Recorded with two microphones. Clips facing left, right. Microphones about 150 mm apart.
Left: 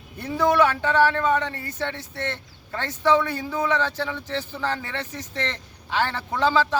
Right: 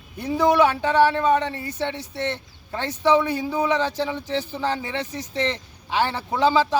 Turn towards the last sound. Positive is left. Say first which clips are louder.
# right 2 dB
turn(degrees=-15)  # may be behind; listen again after turning